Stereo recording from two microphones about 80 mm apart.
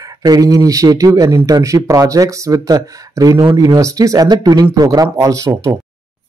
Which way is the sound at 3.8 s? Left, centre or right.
Right.